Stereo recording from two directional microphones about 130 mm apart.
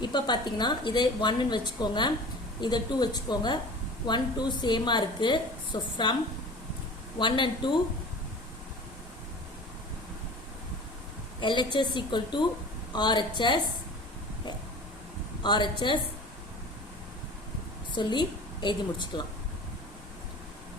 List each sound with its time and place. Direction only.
0.0 s a woman's voice: 35° left (ahead or behind)
7.2 s a woman's voice: 40° left (ahead or behind)
11.3 s a woman's voice: 35° left (ahead or behind)
15.4 s a woman's voice: 35° left (ahead or behind)
17.9 s a woman's voice: 35° left (ahead or behind)